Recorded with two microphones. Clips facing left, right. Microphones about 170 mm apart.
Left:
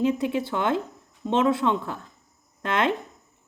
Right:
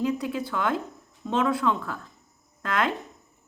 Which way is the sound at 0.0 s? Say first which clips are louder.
Left 3 dB; 25° left (ahead or behind).